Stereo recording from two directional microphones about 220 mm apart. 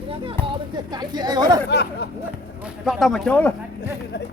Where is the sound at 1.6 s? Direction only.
50° left (ahead or behind).